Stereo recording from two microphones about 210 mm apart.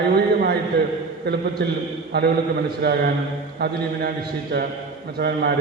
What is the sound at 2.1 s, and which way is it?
Speech, 50° right (ahead or behind).